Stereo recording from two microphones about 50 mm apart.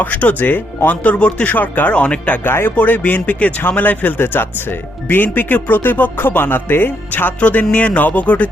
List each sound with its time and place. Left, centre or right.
0.0 s speech: left
1.0 s speech: left
1.9 s music: left
2.4 s speech: left
2.7 s speech: left
7.3 s music: left